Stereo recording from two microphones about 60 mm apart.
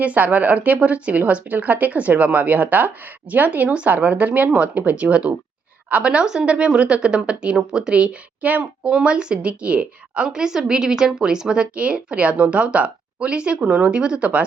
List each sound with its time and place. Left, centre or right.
0.0 s speech: right